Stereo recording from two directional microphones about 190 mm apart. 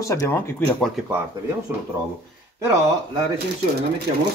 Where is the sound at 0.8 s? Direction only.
Centre (ahead or behind).